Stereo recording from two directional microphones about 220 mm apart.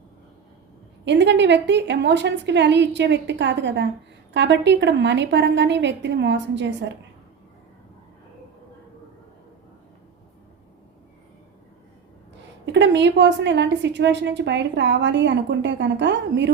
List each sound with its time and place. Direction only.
1.0 s a woman's voice: 55° right (ahead or behind)
12.6 s a woman's voice: 55° right (ahead or behind)